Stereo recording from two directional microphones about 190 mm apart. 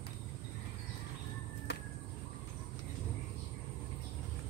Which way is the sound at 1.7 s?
65° left (ahead or behind).